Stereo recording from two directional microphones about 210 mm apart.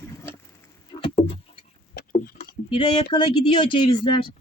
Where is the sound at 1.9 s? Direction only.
45° left (ahead or behind).